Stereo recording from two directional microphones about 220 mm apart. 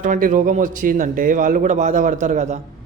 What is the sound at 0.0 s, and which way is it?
A man's voice, 35° right (ahead or behind).